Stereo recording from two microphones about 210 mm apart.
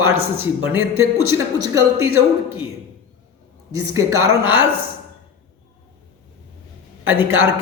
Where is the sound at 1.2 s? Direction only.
90° right.